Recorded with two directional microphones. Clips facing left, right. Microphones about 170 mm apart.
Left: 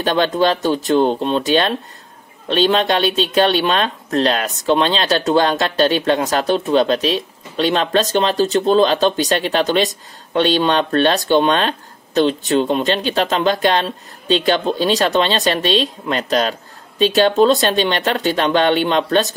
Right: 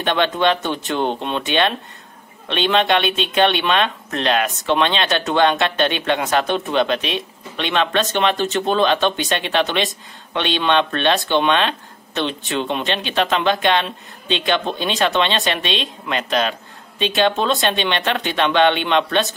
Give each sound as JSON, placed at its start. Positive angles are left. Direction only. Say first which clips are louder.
{"t": 0.0, "sound": "speech", "louder": "left 2 dB", "side_deg": 35}